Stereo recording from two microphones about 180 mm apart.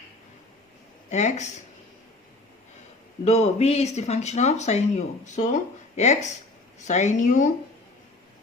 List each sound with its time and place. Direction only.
1.1 s speech: 40° left (ahead or behind)
3.2 s speech: 35° left (ahead or behind)